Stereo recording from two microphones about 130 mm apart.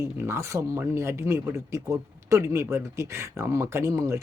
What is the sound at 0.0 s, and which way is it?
Speech, 20° right (ahead or behind).